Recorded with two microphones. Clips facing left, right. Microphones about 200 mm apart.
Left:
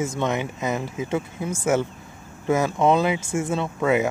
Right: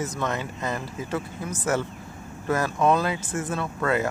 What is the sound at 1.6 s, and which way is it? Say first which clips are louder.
Speech: left 4 dB; 10° left (ahead or behind).